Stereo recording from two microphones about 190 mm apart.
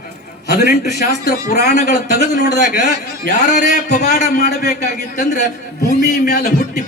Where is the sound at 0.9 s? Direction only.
60° left (ahead or behind).